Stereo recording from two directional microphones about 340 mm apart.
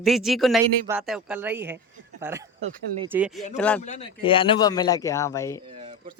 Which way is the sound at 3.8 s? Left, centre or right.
Centre.